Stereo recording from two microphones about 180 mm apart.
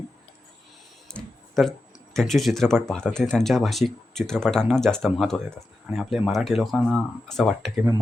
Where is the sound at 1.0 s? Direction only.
5° left (ahead or behind).